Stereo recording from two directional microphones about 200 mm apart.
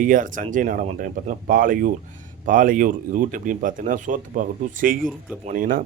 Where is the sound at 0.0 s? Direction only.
40° right (ahead or behind).